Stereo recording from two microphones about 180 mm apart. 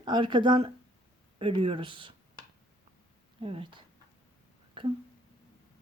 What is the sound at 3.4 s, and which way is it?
Speech, 30° right (ahead or behind).